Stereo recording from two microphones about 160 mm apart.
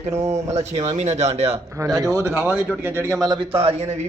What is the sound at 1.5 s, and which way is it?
Speech, 20° right (ahead or behind).